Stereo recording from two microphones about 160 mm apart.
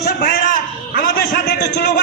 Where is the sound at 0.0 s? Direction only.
65° left (ahead or behind).